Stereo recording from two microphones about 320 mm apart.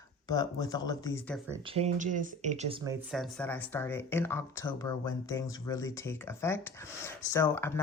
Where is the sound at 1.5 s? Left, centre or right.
Centre.